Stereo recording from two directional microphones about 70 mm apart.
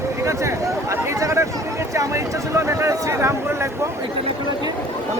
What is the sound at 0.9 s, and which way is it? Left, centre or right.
Speech, right.